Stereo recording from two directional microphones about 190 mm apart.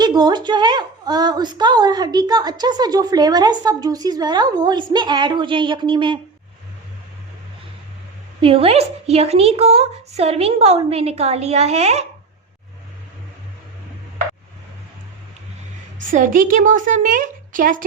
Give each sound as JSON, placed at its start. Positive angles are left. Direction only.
{"t": 0.0, "sound": "a woman's voice", "side_deg": -20}
{"t": 8.4, "sound": "speech", "side_deg": -30}
{"t": 16.0, "sound": "a woman's voice", "side_deg": -45}